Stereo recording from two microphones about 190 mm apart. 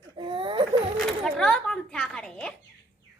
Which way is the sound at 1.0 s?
Centre (ahead or behind).